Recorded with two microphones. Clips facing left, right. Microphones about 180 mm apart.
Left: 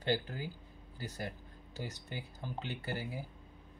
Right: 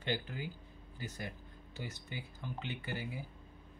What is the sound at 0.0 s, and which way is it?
Speech, 40° left (ahead or behind).